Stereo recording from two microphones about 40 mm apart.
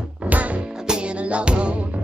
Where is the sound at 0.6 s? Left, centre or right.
Centre; by 2.0 s right.